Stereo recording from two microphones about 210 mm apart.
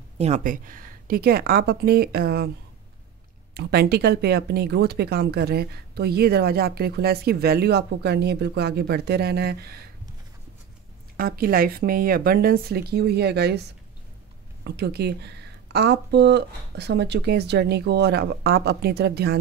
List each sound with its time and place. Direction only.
0.2 s speech: 35° right (ahead or behind)
3.5 s speech: 50° right (ahead or behind)
11.1 s speech: 45° right (ahead or behind)
14.6 s speech: 50° right (ahead or behind)